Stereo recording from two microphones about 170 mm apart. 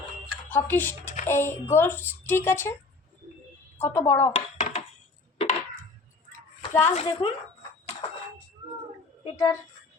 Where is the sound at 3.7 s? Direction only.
15° left (ahead or behind).